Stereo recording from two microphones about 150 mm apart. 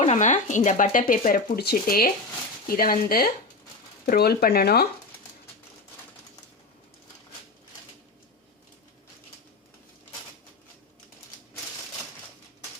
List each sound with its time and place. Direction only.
0.0 s speech: 50° left (ahead or behind); by 3.3 s 80° left
4.0 s speech: 90° left